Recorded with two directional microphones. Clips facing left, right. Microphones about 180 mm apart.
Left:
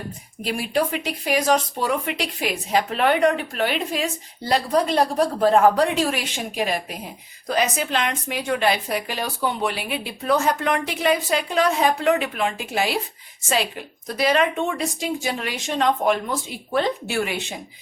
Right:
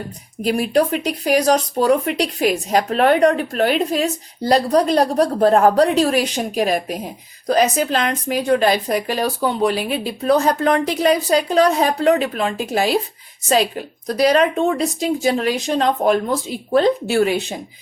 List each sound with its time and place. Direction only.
0.4 s speech: 40° right (ahead or behind)